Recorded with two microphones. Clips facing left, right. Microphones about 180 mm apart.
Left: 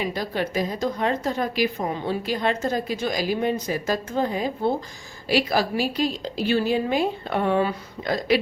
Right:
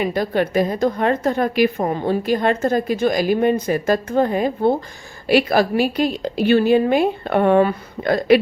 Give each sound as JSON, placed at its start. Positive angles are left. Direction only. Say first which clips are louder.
{"t": 0.0, "sound": "a woman's voice", "louder": "right 7 dB", "side_deg": -55}